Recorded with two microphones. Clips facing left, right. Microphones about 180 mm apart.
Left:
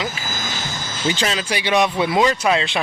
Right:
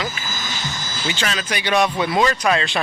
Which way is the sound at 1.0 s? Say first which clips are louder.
Left 4 dB; 30° left (ahead or behind).